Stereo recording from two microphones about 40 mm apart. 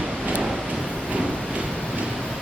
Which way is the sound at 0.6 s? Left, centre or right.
Right.